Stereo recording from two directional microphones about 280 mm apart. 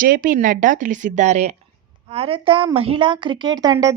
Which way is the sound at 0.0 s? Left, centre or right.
Right.